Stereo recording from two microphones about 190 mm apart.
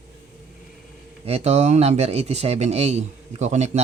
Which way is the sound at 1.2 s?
35° right (ahead or behind).